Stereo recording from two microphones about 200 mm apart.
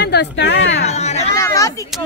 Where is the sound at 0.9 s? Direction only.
35° left (ahead or behind).